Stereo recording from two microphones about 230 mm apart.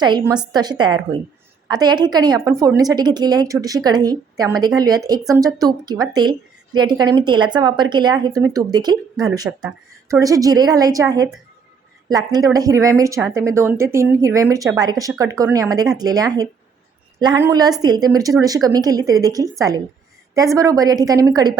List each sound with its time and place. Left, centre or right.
0.0 s a woman's voice: centre